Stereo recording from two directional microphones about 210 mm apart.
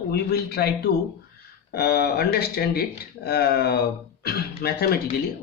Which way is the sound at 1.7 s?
50° left (ahead or behind).